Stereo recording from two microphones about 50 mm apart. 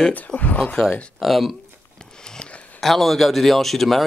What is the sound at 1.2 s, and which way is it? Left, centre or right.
Speech, centre.